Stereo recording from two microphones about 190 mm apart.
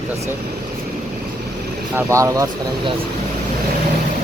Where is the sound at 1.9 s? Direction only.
15° right (ahead or behind).